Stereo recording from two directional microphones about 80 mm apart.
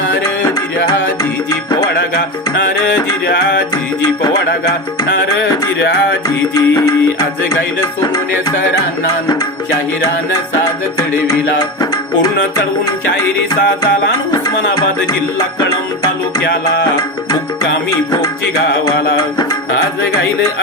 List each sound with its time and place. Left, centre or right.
6.5 s music: left